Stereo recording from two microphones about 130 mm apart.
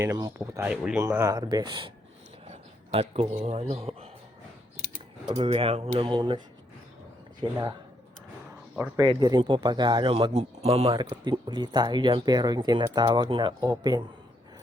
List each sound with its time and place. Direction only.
0.0 s speech: 25° right (ahead or behind)
1.4 s speech: 35° right (ahead or behind)
2.5 s speech: 50° right (ahead or behind)
5.4 s a man's voice: 45° right (ahead or behind)
6.1 s speech: 40° right (ahead or behind)
7.5 s speech: 25° right (ahead or behind)
9.0 s speech: 30° right (ahead or behind)
10.1 s a man's voice: 45° right (ahead or behind)
10.9 s speech: 35° right (ahead or behind)